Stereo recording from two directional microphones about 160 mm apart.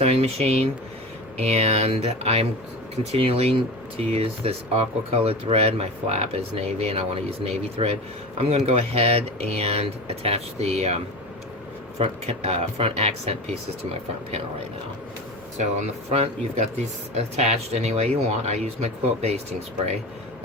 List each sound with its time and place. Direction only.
0.0 s speech: 40° right (ahead or behind)
16.0 s speech: 40° right (ahead or behind)